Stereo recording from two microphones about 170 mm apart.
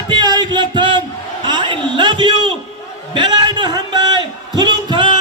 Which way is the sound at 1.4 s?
25° right (ahead or behind).